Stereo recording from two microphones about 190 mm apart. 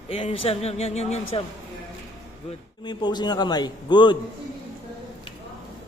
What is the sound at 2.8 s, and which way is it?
A man's voice, 20° left (ahead or behind).